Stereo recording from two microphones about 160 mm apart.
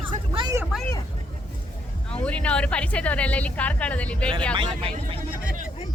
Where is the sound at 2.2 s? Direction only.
5° left (ahead or behind).